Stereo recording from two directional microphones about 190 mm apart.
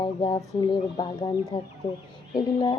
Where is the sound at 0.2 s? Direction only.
20° left (ahead or behind).